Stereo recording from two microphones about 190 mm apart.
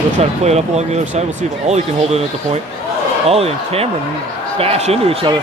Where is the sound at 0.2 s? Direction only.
35° right (ahead or behind).